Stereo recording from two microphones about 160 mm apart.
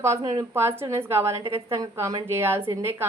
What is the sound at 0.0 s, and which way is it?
A woman's voice, 20° right (ahead or behind).